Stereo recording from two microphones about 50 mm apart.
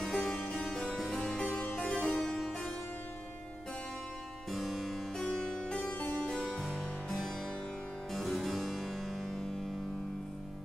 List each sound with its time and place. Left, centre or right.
0.0 s harpsichord: centre
4.5 s music: centre
5.2 s harpsichord: centre
5.9 s harpsichord: left
6.2 s harpsichord: centre